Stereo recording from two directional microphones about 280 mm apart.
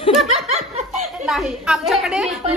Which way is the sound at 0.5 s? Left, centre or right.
Right.